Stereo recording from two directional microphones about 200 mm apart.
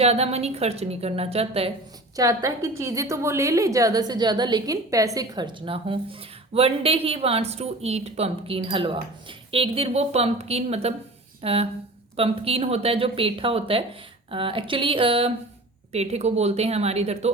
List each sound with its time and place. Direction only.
0.0 s a woman's voice: 30° right (ahead or behind)
2.1 s a woman's voice: 15° right (ahead or behind); by 17.3 s 35° right (ahead or behind)